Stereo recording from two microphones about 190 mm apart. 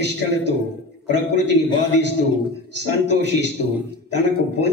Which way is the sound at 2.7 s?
65° right (ahead or behind).